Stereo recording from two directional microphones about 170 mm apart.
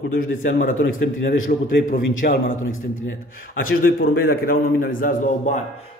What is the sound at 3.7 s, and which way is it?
A man's voice, 65° left (ahead or behind).